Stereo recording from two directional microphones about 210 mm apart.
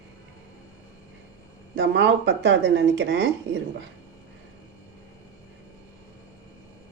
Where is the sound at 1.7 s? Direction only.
55° right (ahead or behind).